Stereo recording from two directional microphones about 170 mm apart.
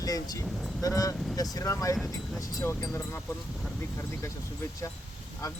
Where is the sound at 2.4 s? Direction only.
20° left (ahead or behind).